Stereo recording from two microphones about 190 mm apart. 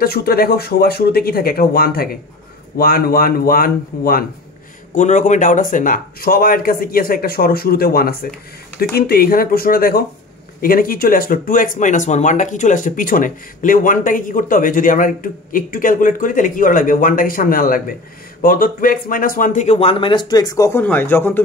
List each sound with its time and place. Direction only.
0.0 s a man's voice: 55° left (ahead or behind); by 21.4 s 10° left (ahead or behind)